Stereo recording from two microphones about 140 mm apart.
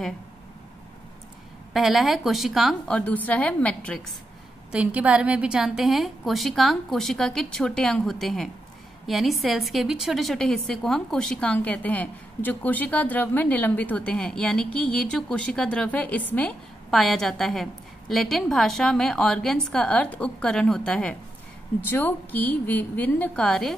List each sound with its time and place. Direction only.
1.7 s a woman's voice: centre (ahead or behind)
3.0 s a woman's voice: 10° left (ahead or behind)
4.7 s a woman's voice: 10° right (ahead or behind); by 16.5 s 10° left (ahead or behind)
16.9 s a woman's voice: centre (ahead or behind)